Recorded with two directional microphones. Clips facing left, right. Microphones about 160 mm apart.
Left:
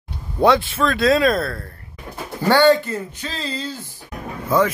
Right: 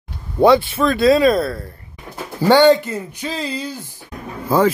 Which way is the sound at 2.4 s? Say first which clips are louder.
Right 3 dB; 20° right (ahead or behind).